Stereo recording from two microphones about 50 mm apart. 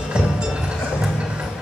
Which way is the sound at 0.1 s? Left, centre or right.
Centre.